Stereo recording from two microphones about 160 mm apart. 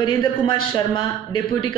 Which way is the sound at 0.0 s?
30° left (ahead or behind).